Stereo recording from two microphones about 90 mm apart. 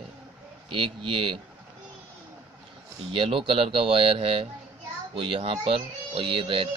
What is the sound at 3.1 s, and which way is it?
Speech, 85° right.